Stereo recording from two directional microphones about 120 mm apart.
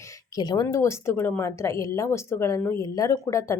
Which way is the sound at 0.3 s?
35° left (ahead or behind).